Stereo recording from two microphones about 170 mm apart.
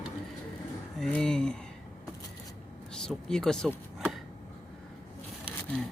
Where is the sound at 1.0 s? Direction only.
5° left (ahead or behind).